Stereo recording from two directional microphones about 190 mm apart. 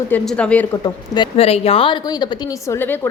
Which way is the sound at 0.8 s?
25° left (ahead or behind).